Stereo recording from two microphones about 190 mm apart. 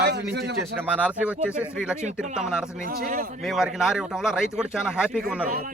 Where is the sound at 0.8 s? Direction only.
5° right (ahead or behind).